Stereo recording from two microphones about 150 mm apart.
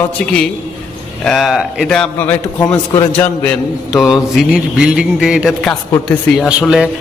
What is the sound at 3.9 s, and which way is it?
Speech, 5° right (ahead or behind).